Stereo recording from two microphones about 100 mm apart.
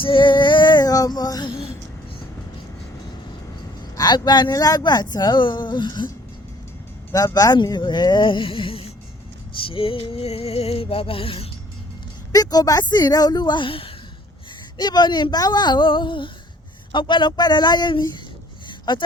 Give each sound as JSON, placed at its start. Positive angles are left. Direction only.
{"t": 0.0, "sound": "female singing", "side_deg": 60}
{"t": 3.9, "sound": "speech", "side_deg": 40}
{"t": 7.3, "sound": "speech", "side_deg": 40}
{"t": 9.6, "sound": "music", "side_deg": 65}
{"t": 12.3, "sound": "a woman's voice", "side_deg": 40}
{"t": 14.8, "sound": "speech", "side_deg": 45}
{"t": 18.7, "sound": "a sound", "side_deg": 55}